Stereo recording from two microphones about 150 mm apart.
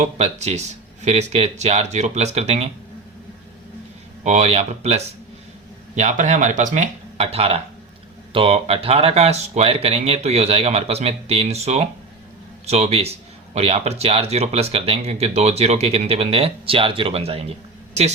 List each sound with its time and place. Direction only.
0.0 s a man's voice: 50° right (ahead or behind)
4.2 s a man's voice: 50° right (ahead or behind)